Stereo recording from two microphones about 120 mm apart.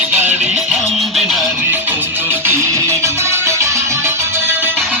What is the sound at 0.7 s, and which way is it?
Music, centre (ahead or behind).